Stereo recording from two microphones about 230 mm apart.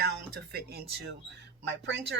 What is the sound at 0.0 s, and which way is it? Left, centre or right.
Speech, right.